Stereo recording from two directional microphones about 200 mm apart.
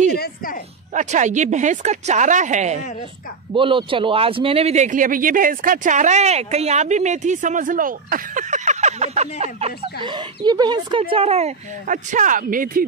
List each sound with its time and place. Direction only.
0.2 s a woman's voice: 45° left (ahead or behind)
0.9 s speech: 35° right (ahead or behind)
3.5 s speech: 25° right (ahead or behind); by 12.8 s 45° right (ahead or behind)